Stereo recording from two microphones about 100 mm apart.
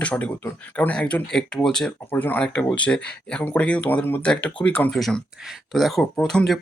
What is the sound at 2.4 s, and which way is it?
Speech, 5° left (ahead or behind).